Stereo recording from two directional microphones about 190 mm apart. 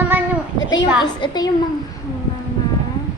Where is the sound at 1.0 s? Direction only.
20° left (ahead or behind).